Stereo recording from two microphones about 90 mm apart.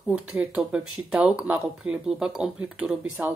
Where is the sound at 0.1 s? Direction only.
15° right (ahead or behind).